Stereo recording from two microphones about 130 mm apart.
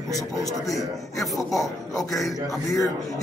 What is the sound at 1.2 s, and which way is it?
A man's voice, centre (ahead or behind).